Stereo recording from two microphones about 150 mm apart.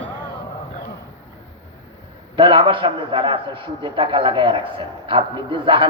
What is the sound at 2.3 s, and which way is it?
Speech, 35° right (ahead or behind).